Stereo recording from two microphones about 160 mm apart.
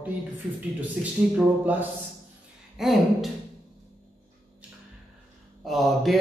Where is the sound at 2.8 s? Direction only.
Centre (ahead or behind).